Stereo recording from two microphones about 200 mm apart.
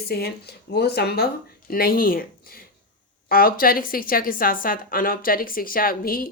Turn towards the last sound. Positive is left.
turn(degrees=45)  # may be behind; listen again after turning